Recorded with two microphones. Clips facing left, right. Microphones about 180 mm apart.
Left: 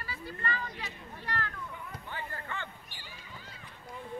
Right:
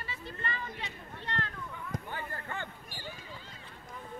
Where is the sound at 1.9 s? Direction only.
40° right (ahead or behind).